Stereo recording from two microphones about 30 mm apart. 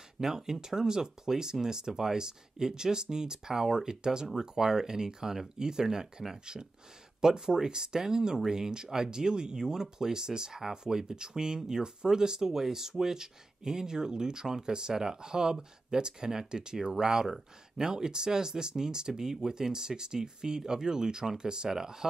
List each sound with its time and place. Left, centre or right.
0.2 s speech: centre